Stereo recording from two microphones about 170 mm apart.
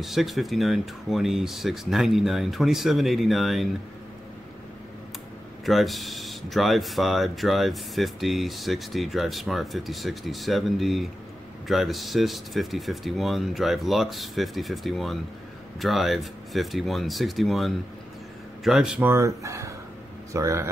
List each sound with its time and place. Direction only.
0.0 s speech: centre (ahead or behind)
5.7 s speech: centre (ahead or behind); by 20.7 s 15° right (ahead or behind)